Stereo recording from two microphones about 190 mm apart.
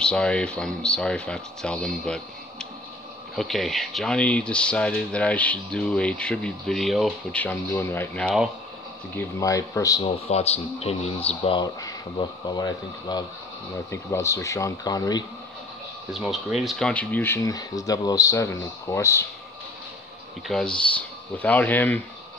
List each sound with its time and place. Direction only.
0.0 s speech: 5° left (ahead or behind)
9.1 s speech: 15° left (ahead or behind)
10.0 s speech: 35° left (ahead or behind)
16.1 s speech: centre (ahead or behind); by 19.2 s 15° left (ahead or behind)
20.4 s speech: 5° left (ahead or behind)